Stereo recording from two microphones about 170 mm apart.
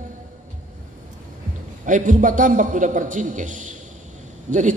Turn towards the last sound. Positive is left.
turn(degrees=-45)  # may be behind; listen again after turning